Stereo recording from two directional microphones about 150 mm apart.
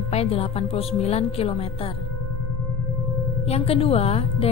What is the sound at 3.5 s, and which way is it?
Speech, 40° left (ahead or behind).